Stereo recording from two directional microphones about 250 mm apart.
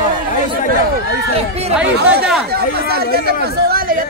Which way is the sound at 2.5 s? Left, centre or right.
Right.